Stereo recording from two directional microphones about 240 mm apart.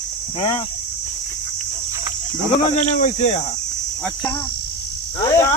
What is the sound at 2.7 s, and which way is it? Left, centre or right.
Speech, left.